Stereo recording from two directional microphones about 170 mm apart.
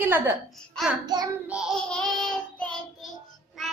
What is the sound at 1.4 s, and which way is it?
Child singing, 5° right (ahead or behind).